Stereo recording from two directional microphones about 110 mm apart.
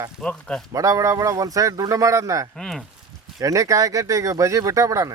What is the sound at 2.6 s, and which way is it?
Speech, 5° left (ahead or behind).